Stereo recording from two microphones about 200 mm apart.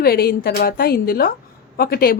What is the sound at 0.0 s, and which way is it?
A woman's voice, 50° left (ahead or behind).